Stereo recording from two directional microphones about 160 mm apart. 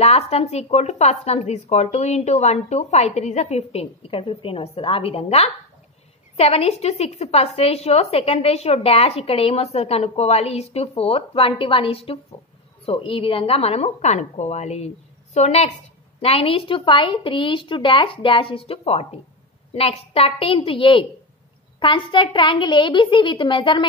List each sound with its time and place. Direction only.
0.0 s a woman's voice: 40° left (ahead or behind)